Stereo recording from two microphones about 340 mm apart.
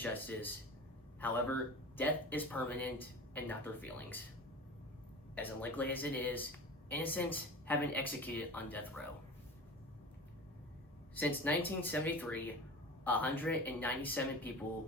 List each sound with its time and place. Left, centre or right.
0.0 s speech: centre
5.3 s speech: centre
11.1 s speech: centre